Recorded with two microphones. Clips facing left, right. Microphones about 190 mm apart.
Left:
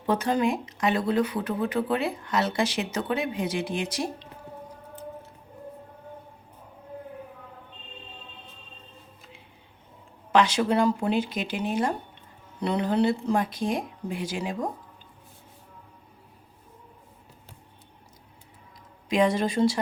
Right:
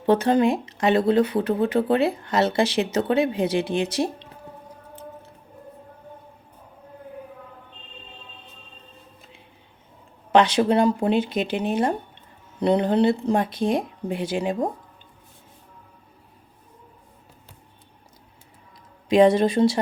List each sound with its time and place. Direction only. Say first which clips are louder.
0.0 s speech: right 6 dB; 25° right (ahead or behind)
10.5 s speech: right 4 dB; 20° right (ahead or behind)
19.0 s a sound: right 7 dB; 25° right (ahead or behind)
19.4 s speech: right 4 dB; 25° right (ahead or behind)